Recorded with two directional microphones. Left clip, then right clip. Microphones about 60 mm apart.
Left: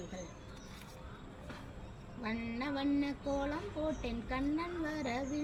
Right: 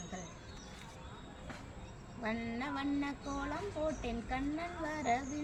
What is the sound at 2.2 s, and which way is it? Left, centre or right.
Speech, right.